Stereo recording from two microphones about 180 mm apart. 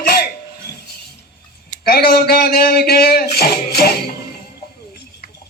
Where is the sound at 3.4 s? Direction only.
60° left (ahead or behind).